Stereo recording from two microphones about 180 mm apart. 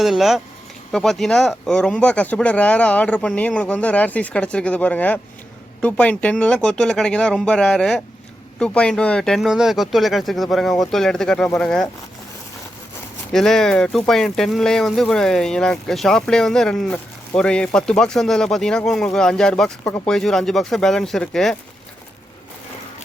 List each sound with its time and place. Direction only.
0.0 s speech: centre (ahead or behind)
13.3 s speech: 5° left (ahead or behind)